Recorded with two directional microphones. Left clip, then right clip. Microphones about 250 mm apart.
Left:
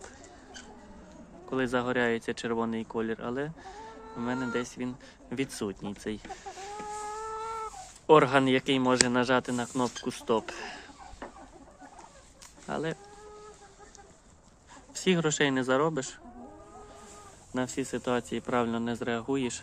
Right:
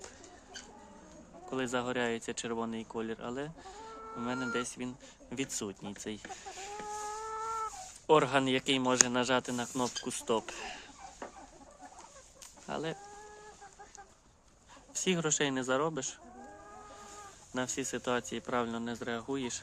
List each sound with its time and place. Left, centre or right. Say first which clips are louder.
1.5 s speech: left 5 dB; centre
6.9 s a sound: left 2 dB; left
8.0 s speech: left 5 dB; centre
12.6 s chicken: left 4 dB; centre
14.9 s speech: left 5 dB; centre
17.5 s speech: left 3 dB; centre